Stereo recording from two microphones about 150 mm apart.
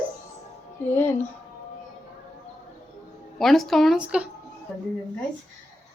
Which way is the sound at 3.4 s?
Centre (ahead or behind).